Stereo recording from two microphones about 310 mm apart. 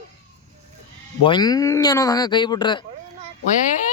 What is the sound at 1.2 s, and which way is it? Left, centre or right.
Speech, centre.